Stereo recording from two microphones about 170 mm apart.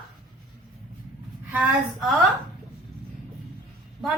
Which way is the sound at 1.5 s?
Centre (ahead or behind).